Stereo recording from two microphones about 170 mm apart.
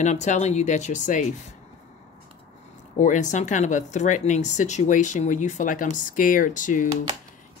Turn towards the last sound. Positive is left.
turn(degrees=50)  # may be behind; listen again after turning